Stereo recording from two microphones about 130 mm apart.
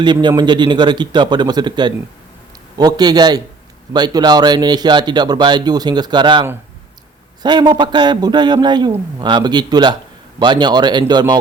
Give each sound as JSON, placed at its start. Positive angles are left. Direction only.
{"t": 0.0, "sound": "speech", "side_deg": -35}
{"t": 7.4, "sound": "speech", "side_deg": -30}